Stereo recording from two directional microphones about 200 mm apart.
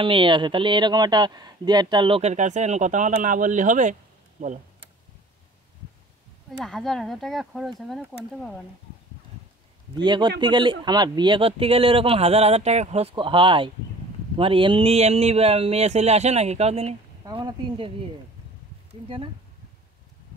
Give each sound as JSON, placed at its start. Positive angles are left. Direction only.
{"t": 0.0, "sound": "speech", "side_deg": -25}
{"t": 6.6, "sound": "speech", "side_deg": 0}
{"t": 9.9, "sound": "speech", "side_deg": -20}
{"t": 17.2, "sound": "speech", "side_deg": -20}
{"t": 19.0, "sound": "speech", "side_deg": -25}